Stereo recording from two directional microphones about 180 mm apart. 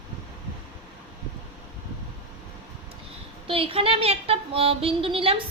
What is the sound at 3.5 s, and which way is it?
Speech, 30° right (ahead or behind).